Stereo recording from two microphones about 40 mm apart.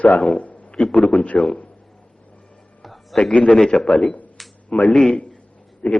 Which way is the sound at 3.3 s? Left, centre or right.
Left.